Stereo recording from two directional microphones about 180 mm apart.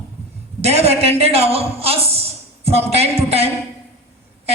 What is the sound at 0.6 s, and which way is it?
A man's voice, 35° right (ahead or behind).